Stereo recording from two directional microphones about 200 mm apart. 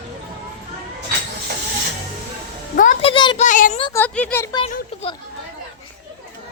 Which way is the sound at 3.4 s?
40° left (ahead or behind).